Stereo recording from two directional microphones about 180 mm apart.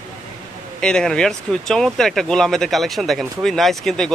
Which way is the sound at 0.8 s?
5° left (ahead or behind).